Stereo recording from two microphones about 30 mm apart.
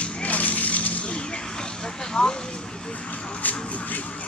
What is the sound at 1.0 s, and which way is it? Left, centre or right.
Vehicle, left.